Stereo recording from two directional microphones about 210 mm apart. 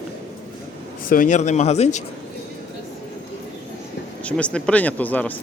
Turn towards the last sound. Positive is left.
turn(degrees=10)  # may be behind; listen again after turning